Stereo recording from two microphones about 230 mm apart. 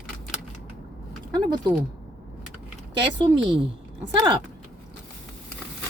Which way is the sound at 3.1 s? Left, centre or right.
Centre.